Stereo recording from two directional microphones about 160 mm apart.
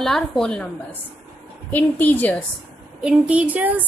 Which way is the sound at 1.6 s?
10° left (ahead or behind).